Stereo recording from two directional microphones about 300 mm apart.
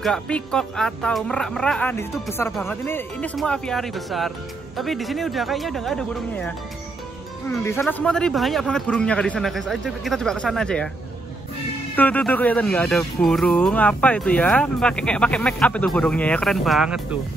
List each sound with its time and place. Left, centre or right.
0.0 s speech: centre
11.9 s speech: centre